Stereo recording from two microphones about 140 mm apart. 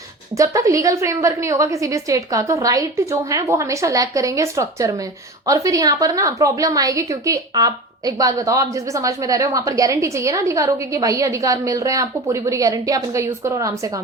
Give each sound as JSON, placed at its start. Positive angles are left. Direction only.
{"t": 0.3, "sound": "a woman's voice", "side_deg": -20}